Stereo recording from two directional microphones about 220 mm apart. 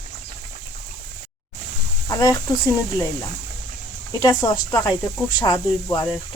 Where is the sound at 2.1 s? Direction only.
15° left (ahead or behind).